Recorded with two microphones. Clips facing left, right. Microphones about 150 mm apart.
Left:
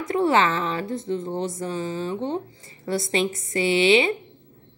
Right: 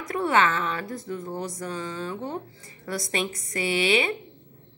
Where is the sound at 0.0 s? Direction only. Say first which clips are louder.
Left 3 dB; 30° left (ahead or behind).